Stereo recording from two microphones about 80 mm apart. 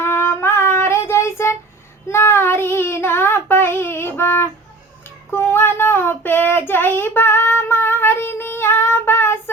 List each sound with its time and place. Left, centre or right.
0.0 s child singing: left